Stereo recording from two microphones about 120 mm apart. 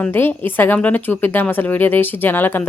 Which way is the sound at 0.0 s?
15° left (ahead or behind).